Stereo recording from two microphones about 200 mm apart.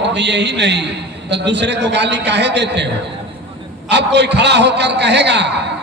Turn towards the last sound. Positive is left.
turn(degrees=-60)  # may be behind; listen again after turning